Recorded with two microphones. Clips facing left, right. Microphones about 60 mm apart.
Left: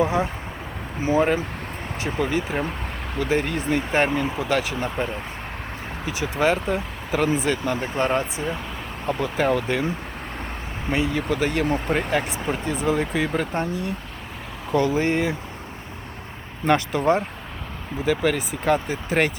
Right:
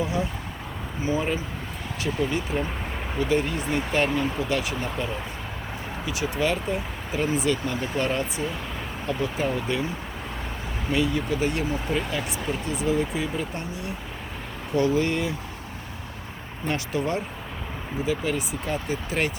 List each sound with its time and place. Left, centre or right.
0.0 s speech: left
3.6 s speech: left
6.1 s speech: left
6.7 s speech: left
7.3 s speech: left
7.6 s speech: left
7.9 s speech: left
9.0 s speech: left
11.1 s speech: left
13.6 s speech: left
16.6 s speech: left
18.0 s speech: left